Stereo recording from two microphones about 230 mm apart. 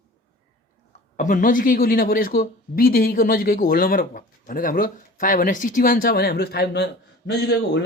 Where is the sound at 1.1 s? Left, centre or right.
Left.